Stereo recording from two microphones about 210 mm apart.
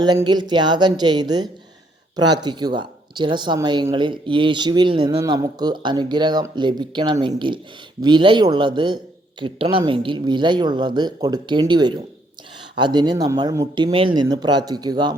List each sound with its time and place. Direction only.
0.0 s speech: 20° right (ahead or behind)